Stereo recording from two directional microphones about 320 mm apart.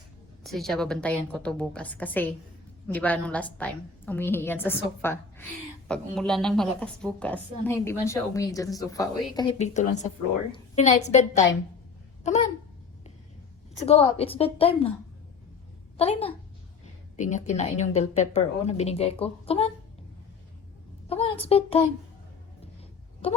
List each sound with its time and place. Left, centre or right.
0.4 s a woman's voice: centre; by 12.5 s left
13.8 s a woman's voice: centre
16.0 s a woman's voice: centre
21.1 s a woman's voice: centre